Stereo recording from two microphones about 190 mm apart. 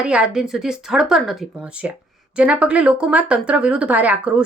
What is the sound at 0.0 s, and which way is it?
Speech, 5° right (ahead or behind).